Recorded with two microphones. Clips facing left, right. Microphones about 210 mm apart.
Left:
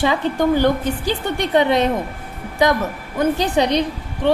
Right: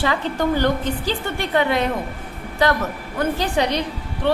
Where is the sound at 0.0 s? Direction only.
15° left (ahead or behind).